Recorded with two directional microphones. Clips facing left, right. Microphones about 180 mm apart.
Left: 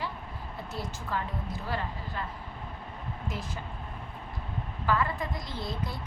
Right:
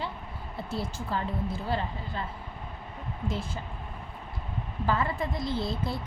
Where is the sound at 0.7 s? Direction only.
30° right (ahead or behind).